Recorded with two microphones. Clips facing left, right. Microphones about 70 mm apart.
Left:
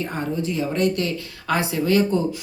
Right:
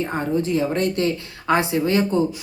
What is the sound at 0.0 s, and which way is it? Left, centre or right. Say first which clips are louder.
Speech: right 3 dB; right.